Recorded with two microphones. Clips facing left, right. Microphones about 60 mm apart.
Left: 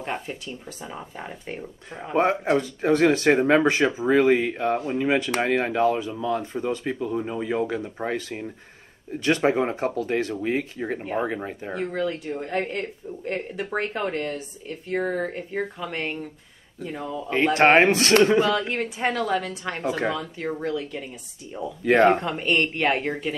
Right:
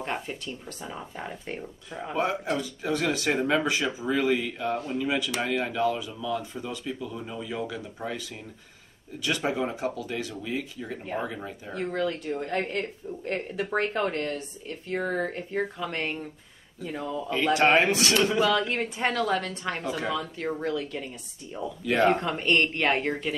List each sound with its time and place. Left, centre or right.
0.0 s speech: centre
2.1 s speech: left
11.7 s speech: centre
17.6 s speech: left
18.7 s speech: centre
21.8 s speech: left
22.1 s speech: centre